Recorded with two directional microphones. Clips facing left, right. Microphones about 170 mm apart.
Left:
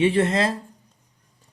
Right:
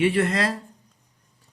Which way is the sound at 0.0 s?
25° left (ahead or behind).